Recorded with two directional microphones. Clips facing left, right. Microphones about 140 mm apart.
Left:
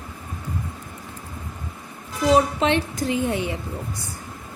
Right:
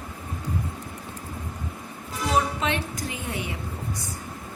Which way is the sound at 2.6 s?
30° left (ahead or behind).